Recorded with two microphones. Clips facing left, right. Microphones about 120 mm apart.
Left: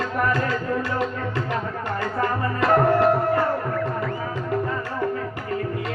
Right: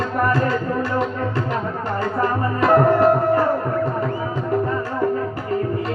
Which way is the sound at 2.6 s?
25° right (ahead or behind).